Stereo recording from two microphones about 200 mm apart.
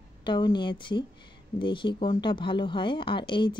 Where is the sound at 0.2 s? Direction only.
20° left (ahead or behind).